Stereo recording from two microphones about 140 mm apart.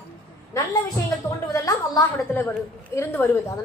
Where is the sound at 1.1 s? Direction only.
20° left (ahead or behind).